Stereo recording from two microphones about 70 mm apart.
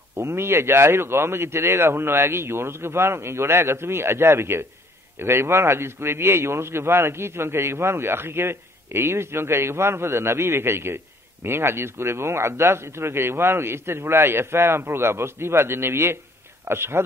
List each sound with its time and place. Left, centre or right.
0.1 s speech: right